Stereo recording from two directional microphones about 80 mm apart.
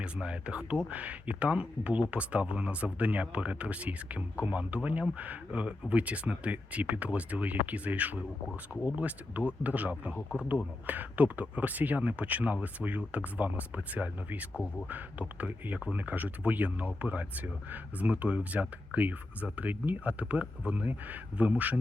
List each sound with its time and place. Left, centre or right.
0.0 s speech: centre
14.5 s speech: centre
14.8 s speech: right